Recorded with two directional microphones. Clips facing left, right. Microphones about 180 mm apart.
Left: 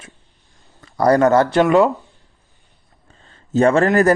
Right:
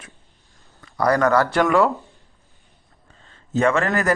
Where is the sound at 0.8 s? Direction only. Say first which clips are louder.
Left 5 dB; 30° left (ahead or behind).